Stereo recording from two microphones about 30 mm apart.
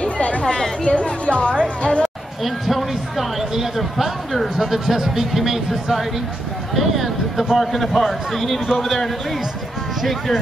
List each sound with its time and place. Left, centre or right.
0.0 s chatter: left
0.8 s a woman's voice: left
2.4 s a man's voice: centre